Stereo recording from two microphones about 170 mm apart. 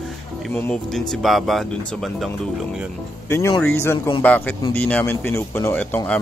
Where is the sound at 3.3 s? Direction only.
15° left (ahead or behind).